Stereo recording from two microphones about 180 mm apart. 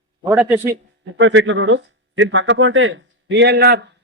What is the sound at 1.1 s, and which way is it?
Speech, 90° right.